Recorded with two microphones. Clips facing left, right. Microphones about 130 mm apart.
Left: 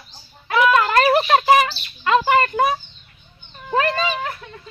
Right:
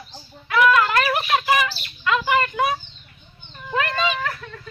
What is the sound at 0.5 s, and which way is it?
Bird, 30° left (ahead or behind).